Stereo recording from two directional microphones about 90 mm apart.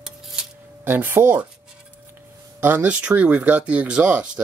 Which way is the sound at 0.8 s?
20° right (ahead or behind).